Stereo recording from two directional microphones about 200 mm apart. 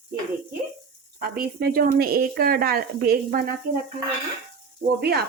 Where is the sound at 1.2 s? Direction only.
50° right (ahead or behind).